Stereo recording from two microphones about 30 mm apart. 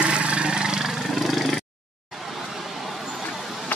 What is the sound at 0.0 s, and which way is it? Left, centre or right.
Vehicle, right.